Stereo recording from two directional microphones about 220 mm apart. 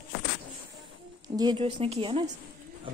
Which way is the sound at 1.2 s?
20° right (ahead or behind).